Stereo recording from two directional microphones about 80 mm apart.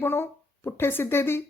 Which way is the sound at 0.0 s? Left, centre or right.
Left.